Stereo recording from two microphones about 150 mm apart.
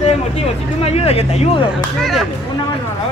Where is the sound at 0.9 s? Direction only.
45° left (ahead or behind).